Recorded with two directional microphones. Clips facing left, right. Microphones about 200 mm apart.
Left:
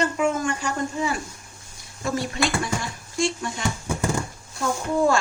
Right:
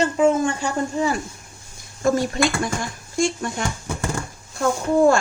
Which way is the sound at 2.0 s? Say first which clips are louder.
Right 6 dB; 45° right (ahead or behind).